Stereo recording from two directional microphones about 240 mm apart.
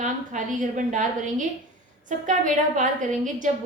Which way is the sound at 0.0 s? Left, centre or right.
Right.